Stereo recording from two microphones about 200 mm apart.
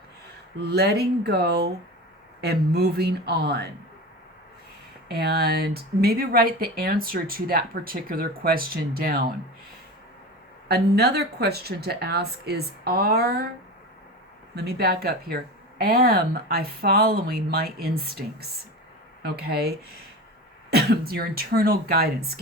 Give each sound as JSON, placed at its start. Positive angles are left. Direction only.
{"t": 0.7, "sound": "speech", "side_deg": -55}
{"t": 5.0, "sound": "speech", "side_deg": -50}
{"t": 10.7, "sound": "speech", "side_deg": -55}
{"t": 14.5, "sound": "speech", "side_deg": -50}